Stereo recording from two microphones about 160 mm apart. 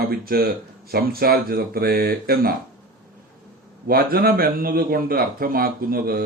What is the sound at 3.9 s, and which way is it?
A man's voice, 70° right (ahead or behind).